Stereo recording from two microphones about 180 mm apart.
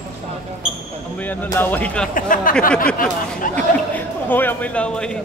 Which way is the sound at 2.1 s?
50° left (ahead or behind).